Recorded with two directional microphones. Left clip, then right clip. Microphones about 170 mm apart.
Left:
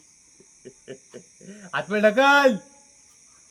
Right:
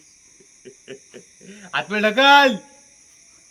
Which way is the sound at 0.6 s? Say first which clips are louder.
Right 2 dB; 65° left (ahead or behind).